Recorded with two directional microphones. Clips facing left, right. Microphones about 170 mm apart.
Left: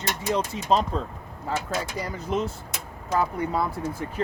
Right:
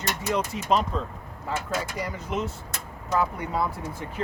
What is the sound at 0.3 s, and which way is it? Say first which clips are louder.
Speech: left 1 dB; 30° left (ahead or behind).